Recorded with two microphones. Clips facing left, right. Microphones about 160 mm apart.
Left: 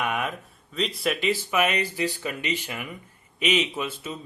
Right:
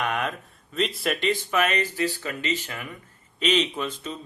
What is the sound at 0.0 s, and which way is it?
Speech, 5° left (ahead or behind).